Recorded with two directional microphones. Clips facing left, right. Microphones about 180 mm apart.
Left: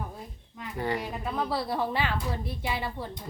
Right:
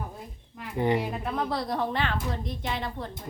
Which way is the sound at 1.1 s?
Centre (ahead or behind).